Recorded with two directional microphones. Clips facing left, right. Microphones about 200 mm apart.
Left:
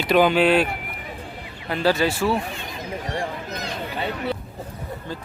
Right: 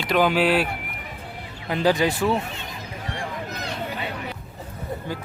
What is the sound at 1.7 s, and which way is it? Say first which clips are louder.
Speech: even; 15° right (ahead or behind).